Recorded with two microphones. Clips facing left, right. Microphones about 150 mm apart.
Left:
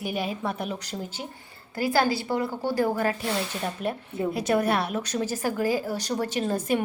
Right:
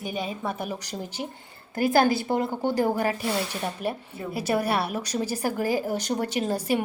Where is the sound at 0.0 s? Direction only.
5° left (ahead or behind).